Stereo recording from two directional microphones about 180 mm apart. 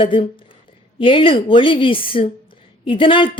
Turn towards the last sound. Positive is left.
turn(degrees=30)  # may be behind; listen again after turning